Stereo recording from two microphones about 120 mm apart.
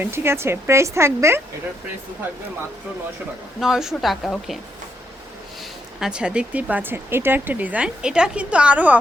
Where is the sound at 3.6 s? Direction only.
5° right (ahead or behind).